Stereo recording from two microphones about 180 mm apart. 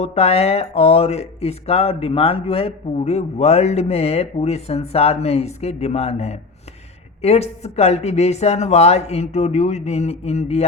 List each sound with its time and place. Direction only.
0.0 s speech: 35° left (ahead or behind)